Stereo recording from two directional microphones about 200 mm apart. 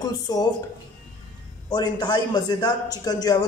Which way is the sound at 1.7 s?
20° left (ahead or behind).